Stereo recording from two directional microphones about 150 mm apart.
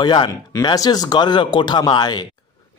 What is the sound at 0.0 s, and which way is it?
A man's voice, 30° left (ahead or behind).